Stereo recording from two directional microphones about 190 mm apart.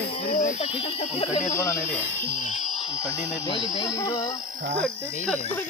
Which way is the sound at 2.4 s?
35° left (ahead or behind).